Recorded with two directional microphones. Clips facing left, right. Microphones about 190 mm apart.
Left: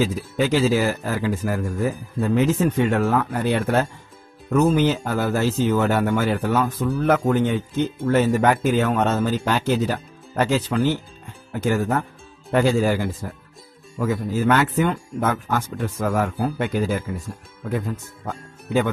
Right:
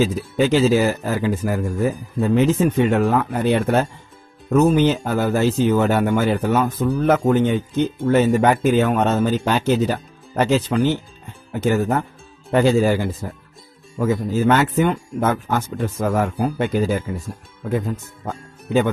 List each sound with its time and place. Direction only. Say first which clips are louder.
0.0 s speech: right 3 dB; 25° right (ahead or behind)